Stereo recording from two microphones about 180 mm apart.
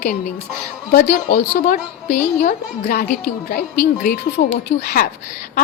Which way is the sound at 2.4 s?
55° left (ahead or behind).